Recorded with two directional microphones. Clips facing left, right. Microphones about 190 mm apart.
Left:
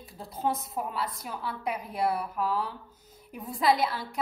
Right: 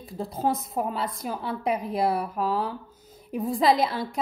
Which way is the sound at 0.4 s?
35° right (ahead or behind).